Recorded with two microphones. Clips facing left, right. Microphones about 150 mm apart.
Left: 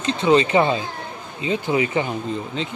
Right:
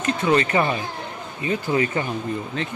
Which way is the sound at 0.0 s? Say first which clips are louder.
Left 3 dB; 20° left (ahead or behind).